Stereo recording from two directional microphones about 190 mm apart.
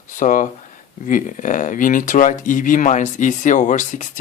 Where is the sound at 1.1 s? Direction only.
45° left (ahead or behind).